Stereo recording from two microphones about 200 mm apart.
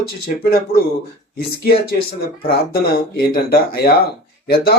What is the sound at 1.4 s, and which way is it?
Speech, 50° left (ahead or behind).